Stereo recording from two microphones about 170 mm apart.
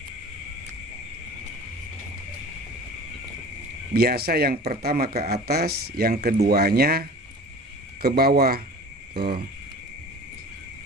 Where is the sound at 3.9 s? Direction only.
65° right (ahead or behind).